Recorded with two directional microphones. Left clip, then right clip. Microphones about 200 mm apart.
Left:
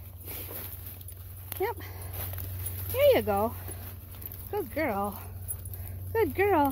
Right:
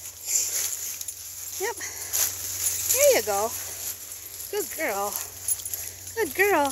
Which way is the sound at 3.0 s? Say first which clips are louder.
Right 2 dB; 15° left (ahead or behind).